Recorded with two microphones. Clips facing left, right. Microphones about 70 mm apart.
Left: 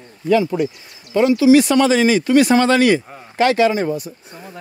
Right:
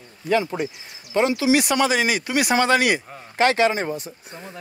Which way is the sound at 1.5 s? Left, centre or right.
Centre.